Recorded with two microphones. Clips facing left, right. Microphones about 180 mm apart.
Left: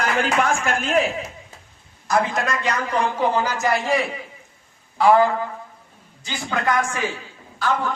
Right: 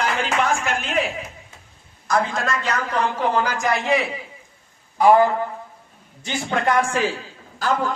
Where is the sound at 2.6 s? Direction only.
10° left (ahead or behind).